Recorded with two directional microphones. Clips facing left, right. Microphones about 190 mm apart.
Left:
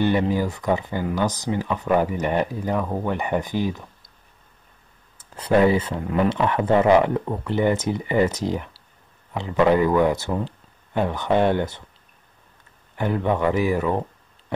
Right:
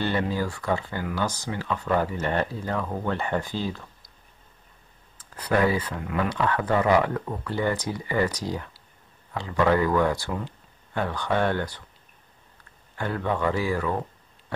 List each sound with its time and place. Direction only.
0.0 s speech: 15° left (ahead or behind)
5.1 s speech: 25° left (ahead or behind)
12.9 s speech: 20° left (ahead or behind)